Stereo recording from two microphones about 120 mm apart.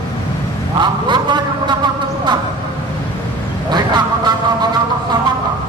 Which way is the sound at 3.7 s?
35° right (ahead or behind).